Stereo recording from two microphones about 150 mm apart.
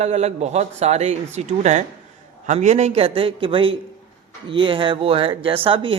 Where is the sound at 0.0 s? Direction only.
45° right (ahead or behind).